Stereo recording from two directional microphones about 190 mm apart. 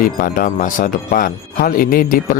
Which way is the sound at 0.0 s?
45° left (ahead or behind).